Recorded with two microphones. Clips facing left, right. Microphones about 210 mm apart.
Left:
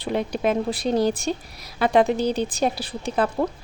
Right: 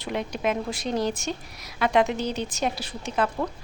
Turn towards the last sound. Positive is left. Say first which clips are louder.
# left 3 dB
turn(degrees=35)  # may be behind; listen again after turning